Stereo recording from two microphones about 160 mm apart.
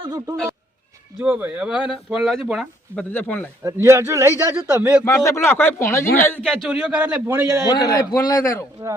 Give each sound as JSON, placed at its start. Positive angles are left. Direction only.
{"t": 0.0, "sound": "speech", "side_deg": -25}
{"t": 1.2, "sound": "speech", "side_deg": -10}
{"t": 3.6, "sound": "a man's voice", "side_deg": -20}
{"t": 5.0, "sound": "a man's voice", "side_deg": 20}
{"t": 6.4, "sound": "a man's voice", "side_deg": 0}
{"t": 7.7, "sound": "a man's voice", "side_deg": 25}